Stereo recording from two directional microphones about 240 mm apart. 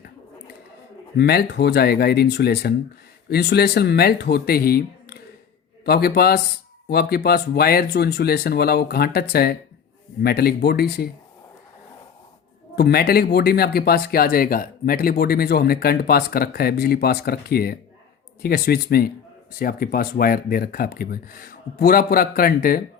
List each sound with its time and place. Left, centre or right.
1.1 s speech: left
12.7 s speech: left